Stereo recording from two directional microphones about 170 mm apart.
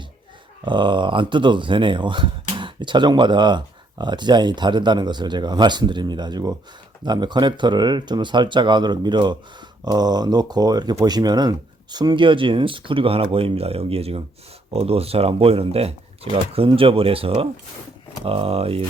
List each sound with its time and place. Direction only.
0.6 s speech: 30° right (ahead or behind)